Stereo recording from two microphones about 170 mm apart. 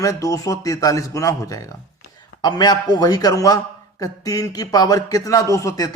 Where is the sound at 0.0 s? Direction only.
20° left (ahead or behind).